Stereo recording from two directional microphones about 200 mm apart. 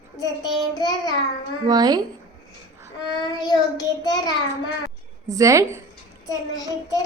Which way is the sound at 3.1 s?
20° left (ahead or behind).